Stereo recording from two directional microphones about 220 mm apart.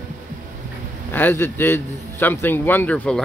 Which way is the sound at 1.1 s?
10° left (ahead or behind).